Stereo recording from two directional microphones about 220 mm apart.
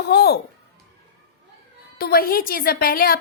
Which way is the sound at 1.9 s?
45° left (ahead or behind).